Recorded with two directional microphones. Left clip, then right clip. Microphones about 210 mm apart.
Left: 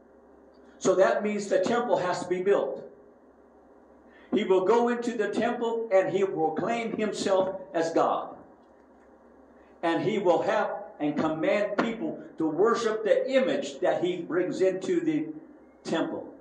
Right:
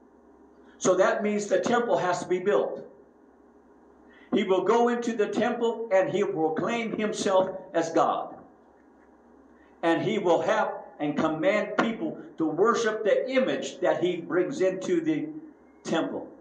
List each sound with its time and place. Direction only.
0.7 s a man's voice: 30° right (ahead or behind)
4.3 s a man's voice: 30° right (ahead or behind)
9.8 s a man's voice: 30° right (ahead or behind)